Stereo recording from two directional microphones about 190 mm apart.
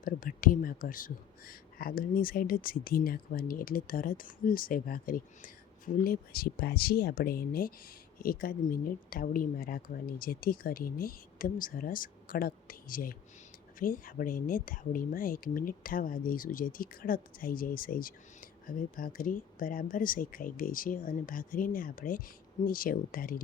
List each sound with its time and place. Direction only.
0.0 s speech: 45° left (ahead or behind)